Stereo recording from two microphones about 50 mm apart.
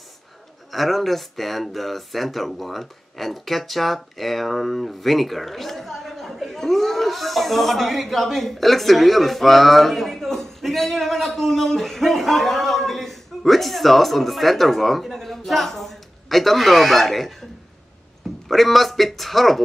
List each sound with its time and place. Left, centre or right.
0.7 s speech: centre
18.5 s speech: centre